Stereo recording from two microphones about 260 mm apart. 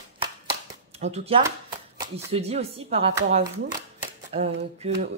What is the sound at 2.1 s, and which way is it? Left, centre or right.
Speech, right.